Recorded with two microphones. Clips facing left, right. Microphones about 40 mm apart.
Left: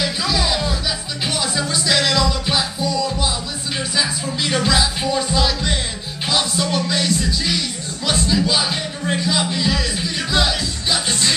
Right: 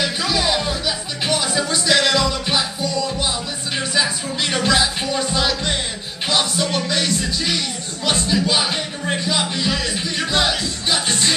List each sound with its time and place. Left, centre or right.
0.0 s music: centre
6.2 s speech: centre